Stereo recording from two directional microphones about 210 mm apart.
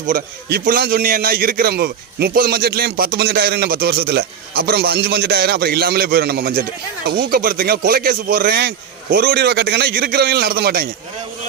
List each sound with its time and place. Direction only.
0.1 s a man's voice: 40° right (ahead or behind)